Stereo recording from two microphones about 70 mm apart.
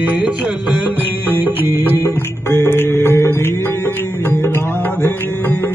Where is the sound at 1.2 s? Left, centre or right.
Right.